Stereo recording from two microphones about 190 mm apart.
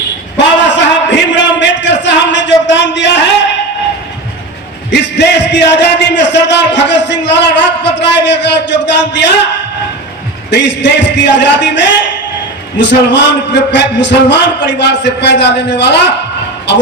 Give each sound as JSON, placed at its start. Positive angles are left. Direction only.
{"t": 0.3, "sound": "a sound", "side_deg": 70}
{"t": 4.9, "sound": "a man's voice", "side_deg": 65}
{"t": 10.5, "sound": "a man's voice", "side_deg": 65}